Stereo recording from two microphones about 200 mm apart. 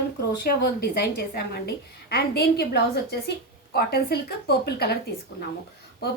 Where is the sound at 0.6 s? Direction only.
55° left (ahead or behind).